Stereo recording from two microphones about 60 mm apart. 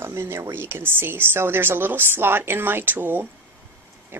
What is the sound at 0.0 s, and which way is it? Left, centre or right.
Speech, right.